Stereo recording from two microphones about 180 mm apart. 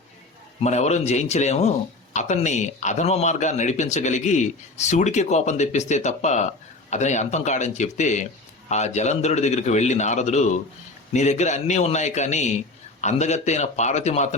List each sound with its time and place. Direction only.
0.6 s a man's voice: 40° left (ahead or behind)